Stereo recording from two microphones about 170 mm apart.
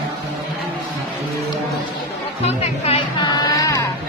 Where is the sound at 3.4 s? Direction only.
20° left (ahead or behind).